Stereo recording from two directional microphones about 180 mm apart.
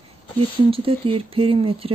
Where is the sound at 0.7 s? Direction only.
30° right (ahead or behind).